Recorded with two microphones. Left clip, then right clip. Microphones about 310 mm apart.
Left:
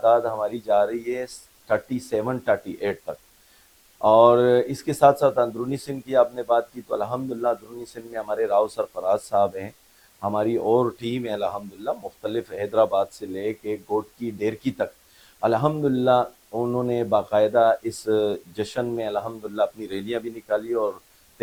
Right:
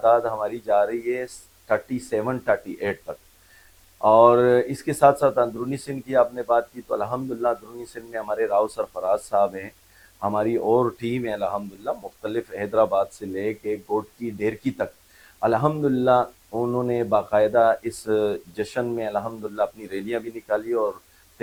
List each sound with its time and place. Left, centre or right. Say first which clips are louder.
0.0 s speech: even; right